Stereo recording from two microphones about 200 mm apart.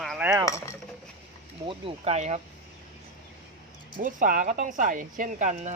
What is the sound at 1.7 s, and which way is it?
Speech, 30° right (ahead or behind).